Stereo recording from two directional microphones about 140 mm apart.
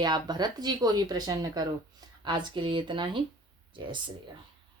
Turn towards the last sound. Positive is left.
turn(degrees=-35)  # may be behind; listen again after turning